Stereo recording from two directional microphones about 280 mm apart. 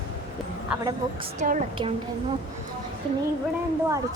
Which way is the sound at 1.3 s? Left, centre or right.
Right.